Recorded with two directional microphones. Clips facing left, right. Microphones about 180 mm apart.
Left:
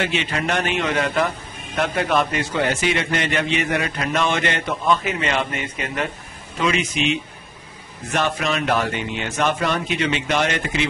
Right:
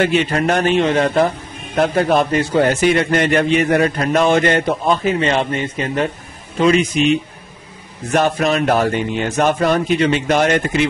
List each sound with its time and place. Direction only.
0.0 s a man's voice: 45° right (ahead or behind)